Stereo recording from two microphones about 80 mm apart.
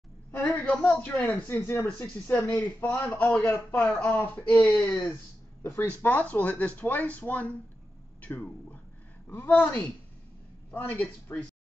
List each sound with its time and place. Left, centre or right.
0.3 s a man's voice: left
5.6 s a man's voice: left